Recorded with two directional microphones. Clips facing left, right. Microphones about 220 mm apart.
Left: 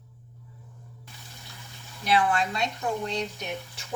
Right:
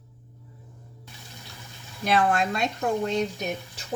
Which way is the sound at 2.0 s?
45° right (ahead or behind).